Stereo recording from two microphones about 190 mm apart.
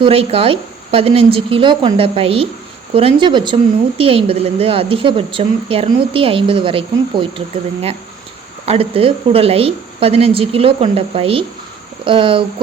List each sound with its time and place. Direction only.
0.0 s a woman's voice: 30° right (ahead or behind)